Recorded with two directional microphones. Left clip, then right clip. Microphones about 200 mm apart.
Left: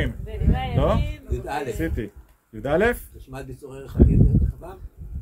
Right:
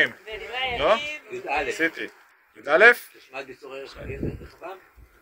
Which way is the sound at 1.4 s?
15° left (ahead or behind).